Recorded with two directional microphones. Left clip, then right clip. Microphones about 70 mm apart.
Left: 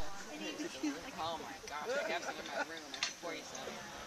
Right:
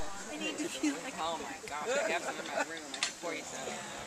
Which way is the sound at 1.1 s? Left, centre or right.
Left.